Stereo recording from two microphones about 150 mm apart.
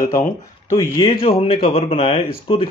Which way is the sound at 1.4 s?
40° left (ahead or behind).